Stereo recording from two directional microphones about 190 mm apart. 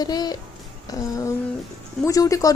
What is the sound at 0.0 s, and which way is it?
Speech, 20° left (ahead or behind).